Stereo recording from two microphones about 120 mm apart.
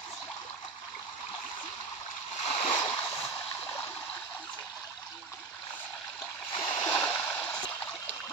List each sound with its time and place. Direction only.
2.4 s splash: 65° left (ahead or behind)
2.7 s a sound: 35° left (ahead or behind)
3.6 s stream: 15° left (ahead or behind)
6.5 s stream: 45° left (ahead or behind)
6.9 s stream: 10° left (ahead or behind)